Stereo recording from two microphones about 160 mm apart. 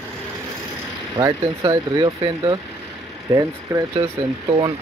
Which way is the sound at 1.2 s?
25° right (ahead or behind).